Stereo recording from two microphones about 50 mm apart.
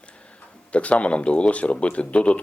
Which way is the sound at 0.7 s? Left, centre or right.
Left.